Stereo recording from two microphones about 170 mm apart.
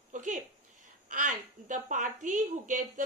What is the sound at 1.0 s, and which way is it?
Speech, 50° right (ahead or behind).